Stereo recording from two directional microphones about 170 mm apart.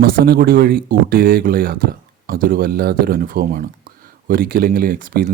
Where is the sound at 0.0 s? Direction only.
65° right (ahead or behind).